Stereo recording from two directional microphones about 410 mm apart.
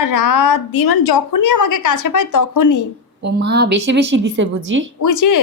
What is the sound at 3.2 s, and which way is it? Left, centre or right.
A woman's voice, right.